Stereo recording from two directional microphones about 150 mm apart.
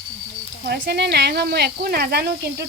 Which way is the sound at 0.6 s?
90° right.